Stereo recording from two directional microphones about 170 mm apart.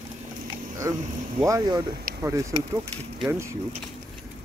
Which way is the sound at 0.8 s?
20° right (ahead or behind).